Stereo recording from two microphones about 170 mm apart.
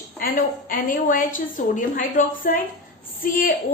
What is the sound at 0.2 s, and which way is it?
A woman's voice, 55° left (ahead or behind).